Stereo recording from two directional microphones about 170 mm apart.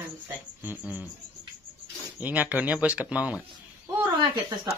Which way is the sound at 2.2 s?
10° right (ahead or behind).